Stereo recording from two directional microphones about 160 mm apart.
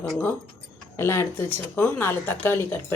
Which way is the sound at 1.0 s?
15° left (ahead or behind).